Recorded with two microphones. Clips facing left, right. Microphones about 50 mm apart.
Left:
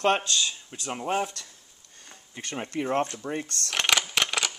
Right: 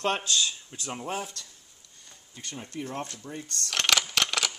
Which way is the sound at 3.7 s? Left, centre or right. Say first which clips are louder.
Left 1 dB; centre.